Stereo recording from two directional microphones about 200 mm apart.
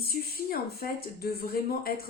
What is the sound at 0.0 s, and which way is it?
Speech, 50° left (ahead or behind).